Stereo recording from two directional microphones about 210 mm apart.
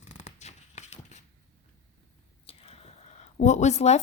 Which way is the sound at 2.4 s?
25° left (ahead or behind).